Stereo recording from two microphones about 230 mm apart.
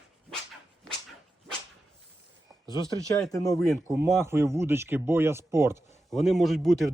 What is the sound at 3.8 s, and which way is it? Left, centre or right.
Speech, centre.